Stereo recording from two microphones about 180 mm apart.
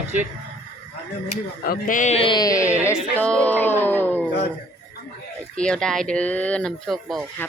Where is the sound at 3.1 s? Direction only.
5° left (ahead or behind).